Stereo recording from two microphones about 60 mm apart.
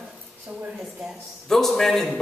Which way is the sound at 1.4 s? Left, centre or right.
Centre.